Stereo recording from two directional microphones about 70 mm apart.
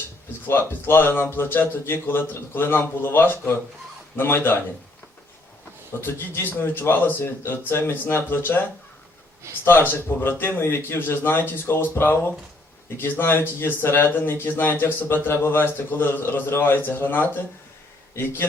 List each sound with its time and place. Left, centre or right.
0.4 s speech: left
6.0 s speech: left
9.9 s speech: left